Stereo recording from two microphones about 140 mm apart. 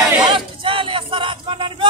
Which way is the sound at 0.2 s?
35° right (ahead or behind).